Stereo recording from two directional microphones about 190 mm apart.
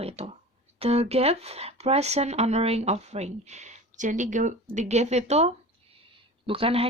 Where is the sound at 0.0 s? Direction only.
35° right (ahead or behind).